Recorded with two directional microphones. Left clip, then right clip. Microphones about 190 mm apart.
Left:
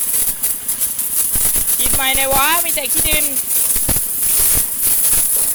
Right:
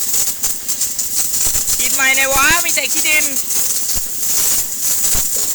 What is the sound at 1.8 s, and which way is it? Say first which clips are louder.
Speech: right 4 dB; 5° left (ahead or behind).